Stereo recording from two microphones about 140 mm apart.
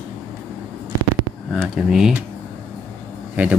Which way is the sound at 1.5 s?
5° right (ahead or behind).